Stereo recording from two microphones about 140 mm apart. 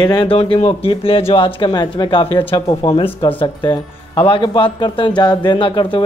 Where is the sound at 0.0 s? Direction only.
30° left (ahead or behind).